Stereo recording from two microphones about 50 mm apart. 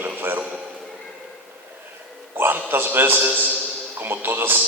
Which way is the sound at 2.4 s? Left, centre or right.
Right.